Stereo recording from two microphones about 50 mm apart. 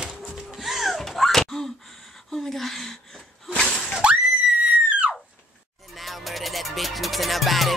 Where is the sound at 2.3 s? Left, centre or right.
Centre.